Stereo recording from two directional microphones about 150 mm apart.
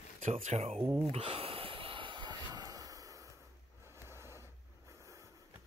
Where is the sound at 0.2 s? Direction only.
45° right (ahead or behind).